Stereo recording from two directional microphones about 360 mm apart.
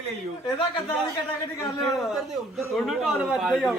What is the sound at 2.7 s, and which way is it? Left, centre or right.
A man's voice, centre.